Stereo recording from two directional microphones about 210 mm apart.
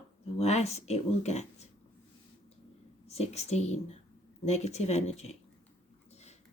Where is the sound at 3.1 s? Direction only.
30° left (ahead or behind).